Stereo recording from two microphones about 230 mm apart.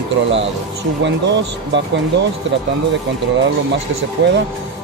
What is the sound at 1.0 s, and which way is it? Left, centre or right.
Speech, right.